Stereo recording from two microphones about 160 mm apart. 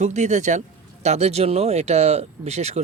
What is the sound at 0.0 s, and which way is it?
Speech, 45° right (ahead or behind).